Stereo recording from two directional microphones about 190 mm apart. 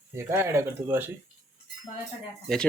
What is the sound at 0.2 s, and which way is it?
Speech, 15° right (ahead or behind).